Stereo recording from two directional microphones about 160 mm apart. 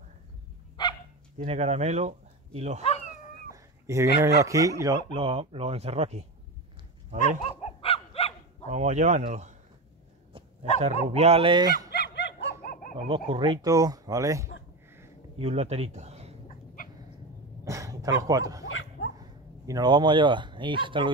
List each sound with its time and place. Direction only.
0.8 s dog: 25° left (ahead or behind)
1.5 s speech: 45° right (ahead or behind)
3.5 s a man's voice: 15° right (ahead or behind); by 6.2 s 40° right (ahead or behind)
7.2 s dog: 40° left (ahead or behind)
8.6 s speech: 45° right (ahead or behind)
11.1 s speech: 40° right (ahead or behind)
11.9 s a sound: 90° left
12.9 s a man's voice: 30° right (ahead or behind)
15.3 s speech: 40° right (ahead or behind)
16.4 s cat: 60° left (ahead or behind)
17.6 s speech: 20° right (ahead or behind)